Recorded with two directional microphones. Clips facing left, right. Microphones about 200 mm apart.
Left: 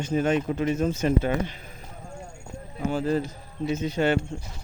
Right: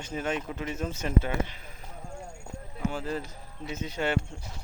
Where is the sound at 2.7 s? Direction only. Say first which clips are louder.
Left 7 dB; 35° left (ahead or behind).